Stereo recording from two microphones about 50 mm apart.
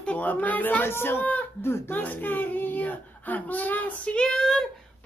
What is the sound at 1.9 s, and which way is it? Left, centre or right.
Speech, left.